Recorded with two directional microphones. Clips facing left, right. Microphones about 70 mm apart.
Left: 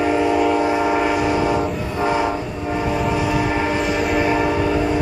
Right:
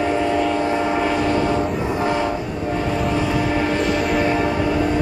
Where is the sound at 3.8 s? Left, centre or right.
Centre.